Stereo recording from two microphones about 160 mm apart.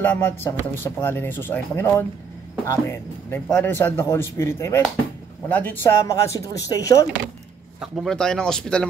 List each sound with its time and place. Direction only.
0.0 s speech: 15° left (ahead or behind)
7.8 s speech: centre (ahead or behind)